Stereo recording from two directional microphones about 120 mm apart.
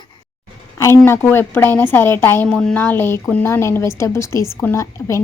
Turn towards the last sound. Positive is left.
turn(degrees=20)  # may be behind; listen again after turning